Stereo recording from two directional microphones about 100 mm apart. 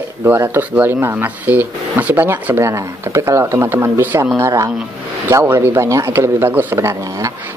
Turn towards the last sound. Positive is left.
turn(degrees=-25)  # may be behind; listen again after turning